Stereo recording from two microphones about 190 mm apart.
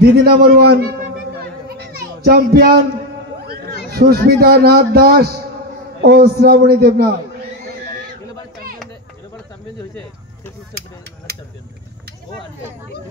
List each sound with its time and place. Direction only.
0.0 s a man's voice: 55° right (ahead or behind)
1.7 s children playing: 55° right (ahead or behind)
3.9 s a man's voice: 55° right (ahead or behind)